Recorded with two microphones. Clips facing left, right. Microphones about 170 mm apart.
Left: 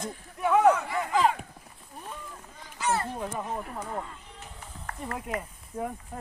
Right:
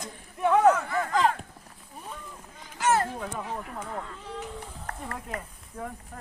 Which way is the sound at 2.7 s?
80° right.